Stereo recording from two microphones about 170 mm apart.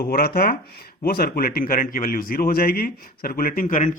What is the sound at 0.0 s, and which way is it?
A man's voice, 60° left (ahead or behind).